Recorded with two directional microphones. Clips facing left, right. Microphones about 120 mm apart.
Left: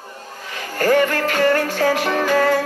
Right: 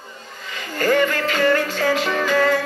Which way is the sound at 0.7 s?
50° left (ahead or behind).